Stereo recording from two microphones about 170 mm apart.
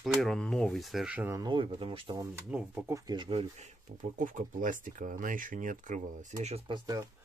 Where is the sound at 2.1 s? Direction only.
15° right (ahead or behind).